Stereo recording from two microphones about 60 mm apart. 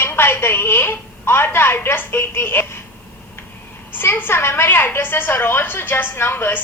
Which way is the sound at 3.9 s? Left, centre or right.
Left.